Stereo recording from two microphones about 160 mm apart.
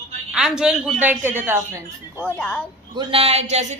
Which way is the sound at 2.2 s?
5° left (ahead or behind).